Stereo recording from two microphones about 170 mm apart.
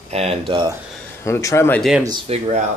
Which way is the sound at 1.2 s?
15° left (ahead or behind).